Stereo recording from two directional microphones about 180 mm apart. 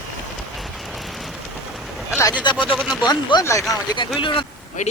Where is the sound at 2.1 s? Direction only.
15° left (ahead or behind).